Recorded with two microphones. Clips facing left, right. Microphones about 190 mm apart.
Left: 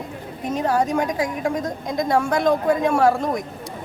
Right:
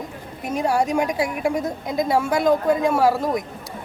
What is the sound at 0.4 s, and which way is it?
A woman's voice, 10° right (ahead or behind).